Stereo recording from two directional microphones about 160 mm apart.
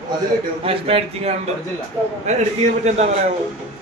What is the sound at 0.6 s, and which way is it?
A man's voice, 35° right (ahead or behind).